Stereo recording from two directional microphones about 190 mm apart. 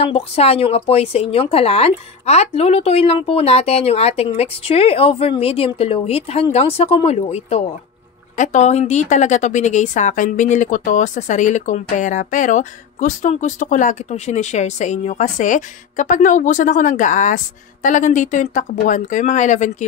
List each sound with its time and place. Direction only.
0.0 s a woman's voice: 30° left (ahead or behind)